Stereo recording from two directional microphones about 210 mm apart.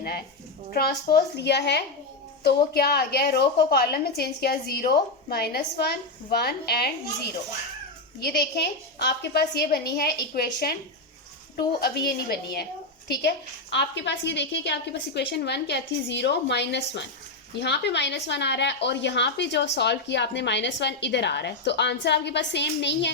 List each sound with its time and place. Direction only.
0.7 s a woman's voice: 50° left (ahead or behind)
8.2 s a woman's voice: 50° left (ahead or behind)
11.8 s a woman's voice: 45° left (ahead or behind)